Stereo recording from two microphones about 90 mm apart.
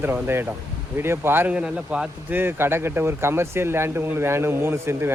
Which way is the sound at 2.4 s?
25° right (ahead or behind).